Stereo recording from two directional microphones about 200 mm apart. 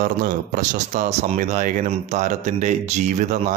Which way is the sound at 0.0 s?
45° right (ahead or behind).